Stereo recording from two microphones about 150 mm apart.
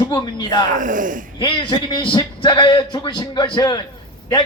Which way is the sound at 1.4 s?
35° left (ahead or behind).